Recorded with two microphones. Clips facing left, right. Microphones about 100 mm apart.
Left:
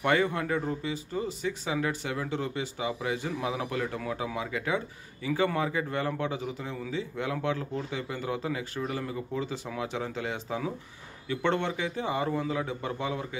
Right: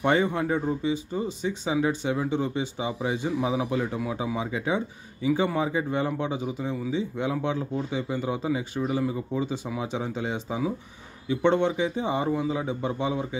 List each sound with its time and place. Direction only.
0.0 s speech: 20° right (ahead or behind)